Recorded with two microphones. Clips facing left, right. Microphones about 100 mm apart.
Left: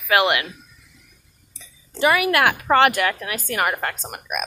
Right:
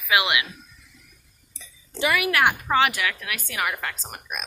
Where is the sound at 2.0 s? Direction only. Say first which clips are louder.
Left 5 dB; 35° left (ahead or behind).